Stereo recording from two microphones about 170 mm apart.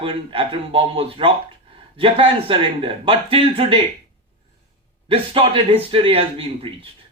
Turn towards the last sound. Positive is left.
turn(degrees=-35)  # may be behind; listen again after turning